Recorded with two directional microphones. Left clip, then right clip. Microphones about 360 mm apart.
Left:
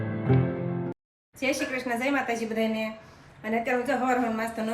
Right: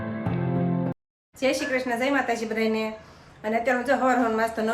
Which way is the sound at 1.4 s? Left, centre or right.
Centre.